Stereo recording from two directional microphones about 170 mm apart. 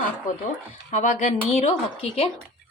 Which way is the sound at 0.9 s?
45° left (ahead or behind).